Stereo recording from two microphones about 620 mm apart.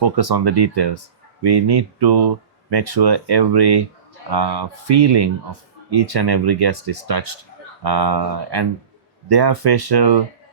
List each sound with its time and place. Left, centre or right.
0.0 s speech: right